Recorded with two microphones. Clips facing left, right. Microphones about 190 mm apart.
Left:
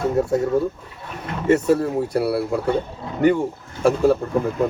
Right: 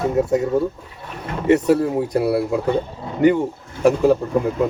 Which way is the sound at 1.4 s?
15° right (ahead or behind).